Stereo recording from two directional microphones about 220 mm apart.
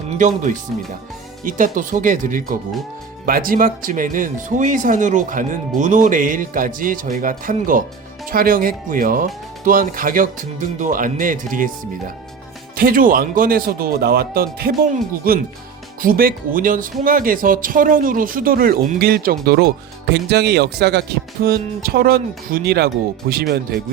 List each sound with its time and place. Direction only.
0.2 s speech: 35° right (ahead or behind)